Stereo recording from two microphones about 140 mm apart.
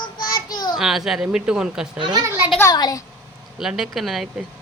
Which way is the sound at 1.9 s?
35° right (ahead or behind).